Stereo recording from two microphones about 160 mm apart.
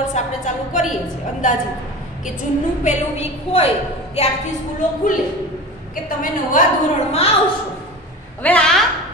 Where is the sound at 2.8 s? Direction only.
45° left (ahead or behind).